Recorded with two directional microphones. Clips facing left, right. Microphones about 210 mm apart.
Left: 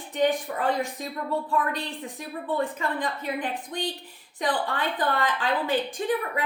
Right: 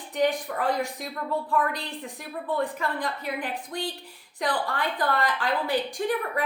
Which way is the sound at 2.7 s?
20° left (ahead or behind).